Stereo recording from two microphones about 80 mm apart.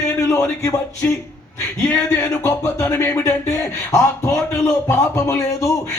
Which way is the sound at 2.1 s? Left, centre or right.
Left.